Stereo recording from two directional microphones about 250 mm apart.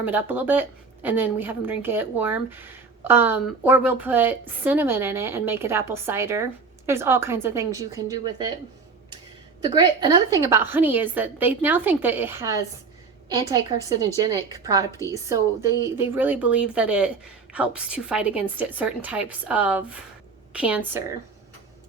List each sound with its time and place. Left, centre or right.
0.0 s a woman's voice: centre
9.6 s a woman's voice: centre